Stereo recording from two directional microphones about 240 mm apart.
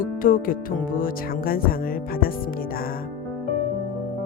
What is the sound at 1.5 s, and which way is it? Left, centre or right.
Speech, left.